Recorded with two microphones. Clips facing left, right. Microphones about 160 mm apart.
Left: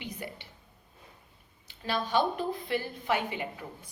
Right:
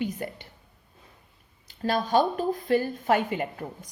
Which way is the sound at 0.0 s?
45° right (ahead or behind).